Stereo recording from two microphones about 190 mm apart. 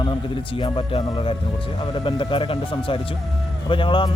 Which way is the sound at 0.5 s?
30° left (ahead or behind).